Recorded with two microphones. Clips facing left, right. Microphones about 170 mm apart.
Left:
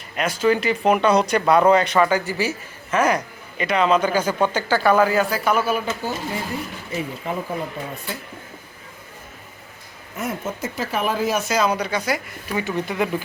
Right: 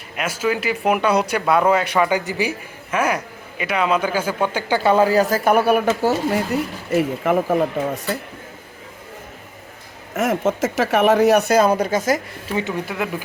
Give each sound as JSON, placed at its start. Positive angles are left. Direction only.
{"t": 0.2, "sound": "speech", "side_deg": -5}
{"t": 4.8, "sound": "speech", "side_deg": -25}
{"t": 6.0, "sound": "speech", "side_deg": -80}
{"t": 10.2, "sound": "speech", "side_deg": -90}
{"t": 12.5, "sound": "speech", "side_deg": -25}
{"t": 12.7, "sound": "speech", "side_deg": -5}